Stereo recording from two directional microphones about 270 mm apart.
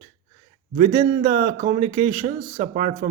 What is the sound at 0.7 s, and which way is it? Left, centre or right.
A man's voice, right.